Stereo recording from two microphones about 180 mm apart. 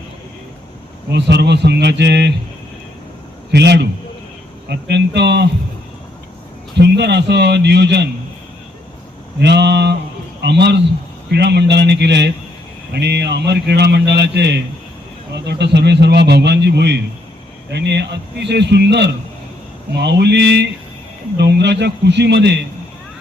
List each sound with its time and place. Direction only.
1.1 s a man's voice: 70° right (ahead or behind)
3.5 s a man's voice: 70° right (ahead or behind)
6.7 s a man's voice: 70° right (ahead or behind)
9.4 s a man's voice: 70° right (ahead or behind)